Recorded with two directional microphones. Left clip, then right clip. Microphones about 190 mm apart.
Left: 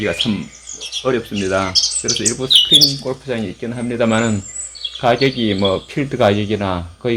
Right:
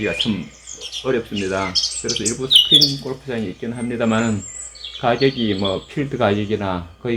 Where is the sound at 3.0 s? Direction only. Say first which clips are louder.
Left 4 dB; 45° left (ahead or behind).